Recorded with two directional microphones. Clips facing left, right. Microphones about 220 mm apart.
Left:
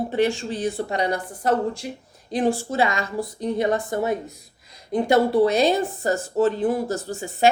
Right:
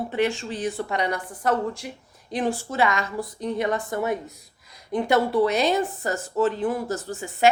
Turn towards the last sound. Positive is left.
turn(degrees=30)  # may be behind; listen again after turning